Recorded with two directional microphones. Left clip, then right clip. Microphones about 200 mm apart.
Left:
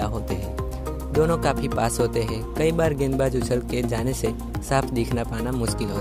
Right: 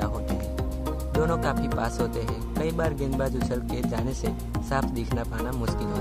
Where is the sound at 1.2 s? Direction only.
35° left (ahead or behind).